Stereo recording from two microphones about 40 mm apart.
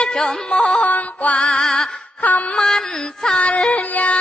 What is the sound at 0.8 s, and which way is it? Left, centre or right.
Music, left.